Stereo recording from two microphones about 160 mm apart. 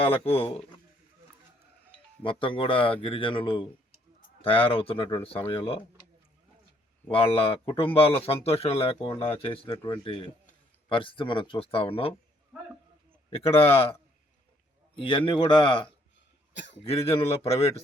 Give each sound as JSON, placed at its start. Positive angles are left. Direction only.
{"t": 0.0, "sound": "speech", "side_deg": 35}
{"t": 2.2, "sound": "speech", "side_deg": 30}
{"t": 7.1, "sound": "speech", "side_deg": 35}
{"t": 13.3, "sound": "speech", "side_deg": 35}
{"t": 15.0, "sound": "speech", "side_deg": 30}
{"t": 16.6, "sound": "a man's voice", "side_deg": 90}
{"t": 16.8, "sound": "speech", "side_deg": 35}